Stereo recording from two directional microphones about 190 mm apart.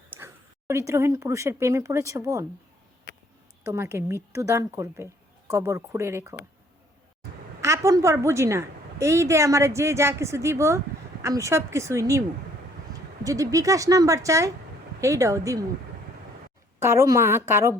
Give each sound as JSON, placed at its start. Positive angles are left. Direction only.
{"t": 0.1, "sound": "a sound", "side_deg": -10}
{"t": 0.7, "sound": "a woman's voice", "side_deg": -15}
{"t": 3.6, "sound": "a woman's voice", "side_deg": -15}
{"t": 7.6, "sound": "a woman's voice", "side_deg": -15}
{"t": 13.2, "sound": "a woman's voice", "side_deg": -15}
{"t": 16.8, "sound": "a woman's voice", "side_deg": -15}